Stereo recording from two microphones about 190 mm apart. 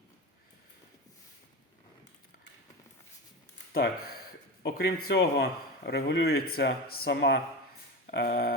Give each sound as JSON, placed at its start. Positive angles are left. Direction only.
{"t": 3.7, "sound": "speech", "side_deg": 55}